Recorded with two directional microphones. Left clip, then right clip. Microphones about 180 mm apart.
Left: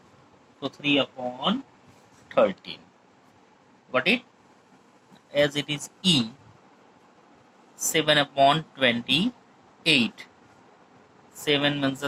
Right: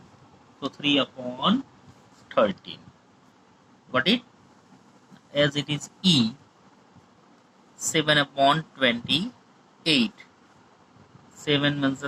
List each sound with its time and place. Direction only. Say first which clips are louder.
0.6 s speech: even; 20° left (ahead or behind)
3.9 s speech: even; 25° left (ahead or behind)
5.3 s speech: even; 20° left (ahead or behind)
7.8 s speech: even; 25° left (ahead or behind)
11.3 s speech: even; 25° left (ahead or behind)